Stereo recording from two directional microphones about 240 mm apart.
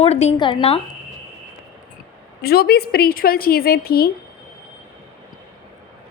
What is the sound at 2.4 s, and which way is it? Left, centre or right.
A woman's voice, left.